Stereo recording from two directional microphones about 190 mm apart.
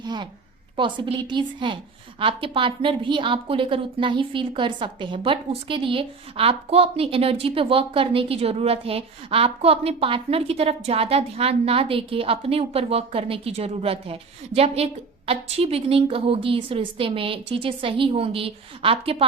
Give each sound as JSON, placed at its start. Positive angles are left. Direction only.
{"t": 0.0, "sound": "a woman's voice", "side_deg": -20}